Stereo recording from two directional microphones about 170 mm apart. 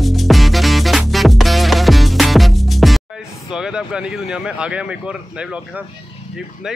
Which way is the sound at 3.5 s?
5° right (ahead or behind).